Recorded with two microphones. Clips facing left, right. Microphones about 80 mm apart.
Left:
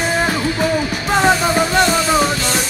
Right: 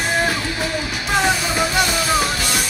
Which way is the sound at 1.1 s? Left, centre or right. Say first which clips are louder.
Left 5 dB; left.